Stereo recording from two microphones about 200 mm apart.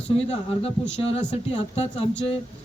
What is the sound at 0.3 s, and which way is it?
Speech, 30° left (ahead or behind).